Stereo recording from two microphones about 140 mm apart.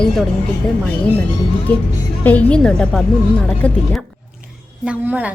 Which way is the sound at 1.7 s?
10° left (ahead or behind).